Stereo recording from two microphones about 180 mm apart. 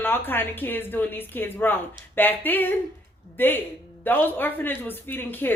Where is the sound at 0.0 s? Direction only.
10° left (ahead or behind).